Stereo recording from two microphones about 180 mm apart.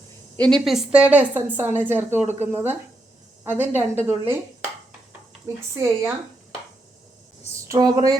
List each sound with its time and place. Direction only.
0.3 s a woman's voice: 5° left (ahead or behind); by 4.4 s 10° right (ahead or behind)
5.7 s a woman's voice: 15° right (ahead or behind)
7.7 s a woman's voice: 20° right (ahead or behind)